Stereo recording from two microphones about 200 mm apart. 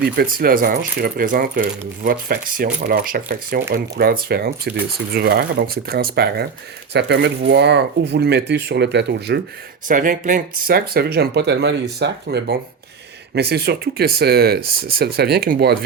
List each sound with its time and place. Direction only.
0.0 s speech: 50° right (ahead or behind)
9.9 s speech: 40° right (ahead or behind)